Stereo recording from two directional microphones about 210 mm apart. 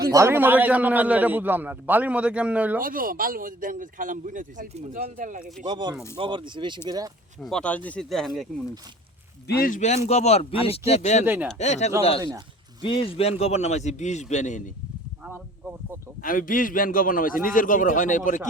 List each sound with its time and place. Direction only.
0.0 s a man's voice: 15° right (ahead or behind)
2.8 s a man's voice: 45° right (ahead or behind)
5.6 s speech: 20° right (ahead or behind)
7.4 s speech: 5° left (ahead or behind)
9.5 s a man's voice: 45° left (ahead or behind)
15.2 s a sound: 10° right (ahead or behind)
16.2 s a man's voice: 40° left (ahead or behind)